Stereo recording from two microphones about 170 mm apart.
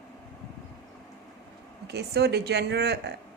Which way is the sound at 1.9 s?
75° right (ahead or behind).